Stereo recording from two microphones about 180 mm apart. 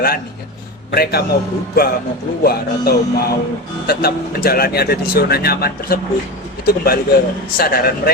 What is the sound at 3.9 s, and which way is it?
A man's voice, 60° left (ahead or behind).